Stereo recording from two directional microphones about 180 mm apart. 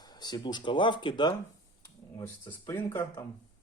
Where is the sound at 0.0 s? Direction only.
20° left (ahead or behind).